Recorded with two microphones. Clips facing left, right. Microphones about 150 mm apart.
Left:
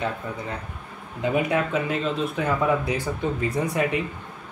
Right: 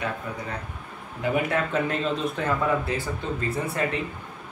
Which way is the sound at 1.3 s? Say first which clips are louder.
Left 1 dB; 15° left (ahead or behind).